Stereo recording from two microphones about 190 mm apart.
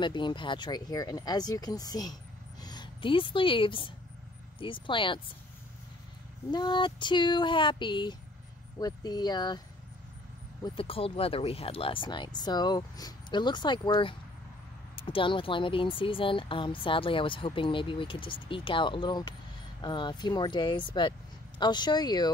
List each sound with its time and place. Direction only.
0.0 s speech: 25° left (ahead or behind)
6.5 s speech: 25° left (ahead or behind)
10.6 s speech: 30° left (ahead or behind)